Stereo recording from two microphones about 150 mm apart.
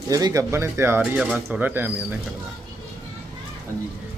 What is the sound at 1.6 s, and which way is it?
Speech, 15° right (ahead or behind).